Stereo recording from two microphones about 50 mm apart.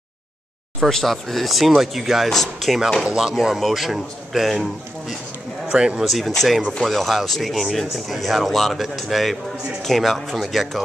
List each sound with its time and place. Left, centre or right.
0.8 s speech: centre
3.2 s speech: centre
5.7 s speech: centre
6.0 s speech: centre